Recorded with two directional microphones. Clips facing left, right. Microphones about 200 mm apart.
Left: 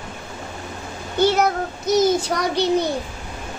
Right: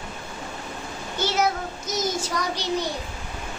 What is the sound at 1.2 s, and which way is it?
Child singing, 60° left (ahead or behind).